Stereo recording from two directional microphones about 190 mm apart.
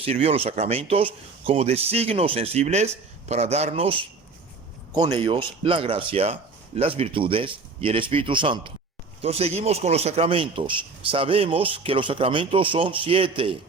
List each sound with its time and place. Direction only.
0.0 s a man's voice: 30° right (ahead or behind)